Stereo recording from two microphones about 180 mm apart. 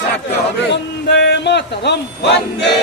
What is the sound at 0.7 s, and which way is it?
Speech, 70° left (ahead or behind).